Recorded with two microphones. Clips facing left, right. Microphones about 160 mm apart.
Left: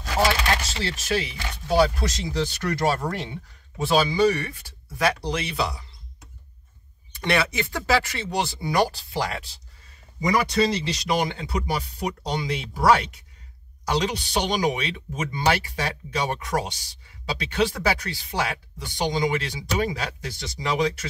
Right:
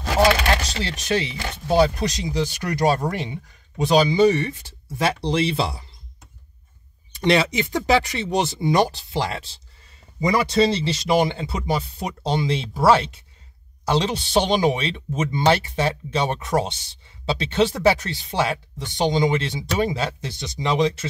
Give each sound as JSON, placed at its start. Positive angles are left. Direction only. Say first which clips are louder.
{"t": 0.0, "sound": "chopping", "louder": "right 5 dB", "side_deg": -75}
{"t": 0.8, "sound": "speech", "louder": "right 1 dB", "side_deg": -20}
{"t": 7.2, "sound": "speech", "louder": "right 5 dB", "side_deg": -20}